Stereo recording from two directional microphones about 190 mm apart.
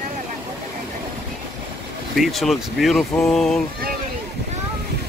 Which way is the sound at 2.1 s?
Centre (ahead or behind).